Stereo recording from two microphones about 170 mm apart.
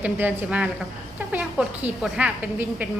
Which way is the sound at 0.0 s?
10° right (ahead or behind).